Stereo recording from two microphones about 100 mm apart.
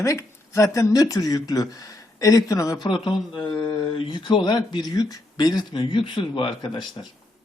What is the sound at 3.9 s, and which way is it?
Speech, 60° left (ahead or behind).